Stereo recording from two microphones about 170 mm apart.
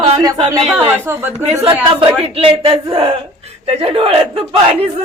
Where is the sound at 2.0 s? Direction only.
35° right (ahead or behind).